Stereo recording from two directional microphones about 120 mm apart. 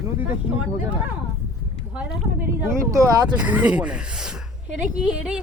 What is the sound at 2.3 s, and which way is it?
Speech, 20° right (ahead or behind).